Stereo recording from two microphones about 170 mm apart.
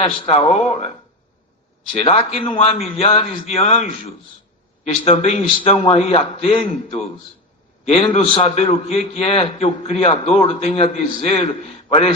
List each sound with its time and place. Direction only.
0.2 s a man's voice: 35° left (ahead or behind)
2.0 s a man's voice: 35° left (ahead or behind)
5.0 s a man's voice: 40° left (ahead or behind)